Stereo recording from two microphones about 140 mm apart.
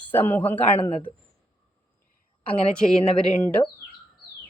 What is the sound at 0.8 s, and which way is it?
Speech, 40° left (ahead or behind).